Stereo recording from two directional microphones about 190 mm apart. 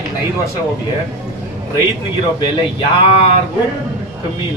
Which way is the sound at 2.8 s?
30° left (ahead or behind).